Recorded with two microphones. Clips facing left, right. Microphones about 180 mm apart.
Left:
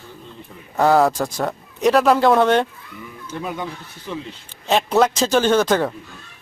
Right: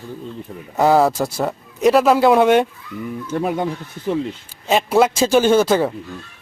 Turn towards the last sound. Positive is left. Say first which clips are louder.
# right 2 dB
turn(degrees=-5)  # may be behind; listen again after turning